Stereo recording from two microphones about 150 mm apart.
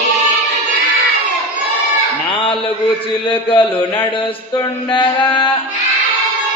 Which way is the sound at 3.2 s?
35° left (ahead or behind).